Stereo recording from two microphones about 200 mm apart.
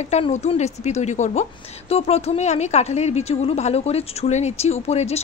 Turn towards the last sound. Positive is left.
turn(degrees=30)  # may be behind; listen again after turning